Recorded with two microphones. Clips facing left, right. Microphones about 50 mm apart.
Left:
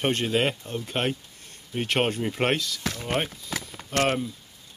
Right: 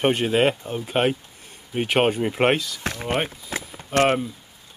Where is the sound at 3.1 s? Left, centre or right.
Right.